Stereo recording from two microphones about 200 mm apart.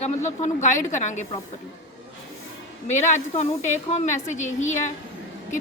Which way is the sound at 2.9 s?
35° left (ahead or behind).